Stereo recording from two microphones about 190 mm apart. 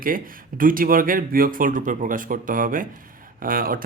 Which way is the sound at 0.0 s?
45° right (ahead or behind).